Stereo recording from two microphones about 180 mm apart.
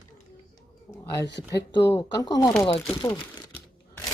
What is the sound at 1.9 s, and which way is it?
Speech, 20° left (ahead or behind).